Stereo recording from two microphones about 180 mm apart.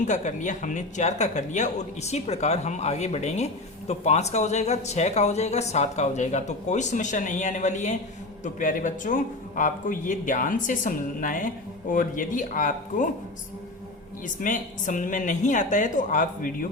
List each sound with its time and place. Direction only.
0.0 s a man's voice: 45° left (ahead or behind)
14.4 s a man's voice: 45° left (ahead or behind)